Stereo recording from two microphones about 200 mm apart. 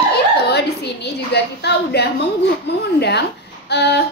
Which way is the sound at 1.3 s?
55° left (ahead or behind).